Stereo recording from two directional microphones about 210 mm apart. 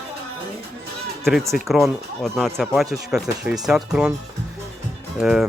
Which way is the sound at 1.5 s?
Centre (ahead or behind).